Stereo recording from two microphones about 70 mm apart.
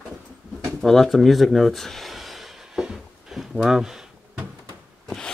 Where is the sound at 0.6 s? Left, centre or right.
Centre.